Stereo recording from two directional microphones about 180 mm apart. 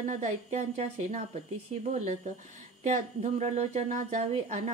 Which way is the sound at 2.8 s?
45° right (ahead or behind).